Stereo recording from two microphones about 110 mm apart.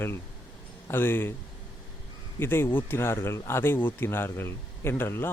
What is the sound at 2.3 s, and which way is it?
Speech, 20° left (ahead or behind).